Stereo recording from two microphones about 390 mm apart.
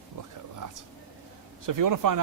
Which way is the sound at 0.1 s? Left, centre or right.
Right.